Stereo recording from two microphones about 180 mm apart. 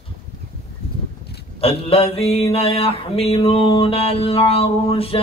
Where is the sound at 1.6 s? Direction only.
30° left (ahead or behind).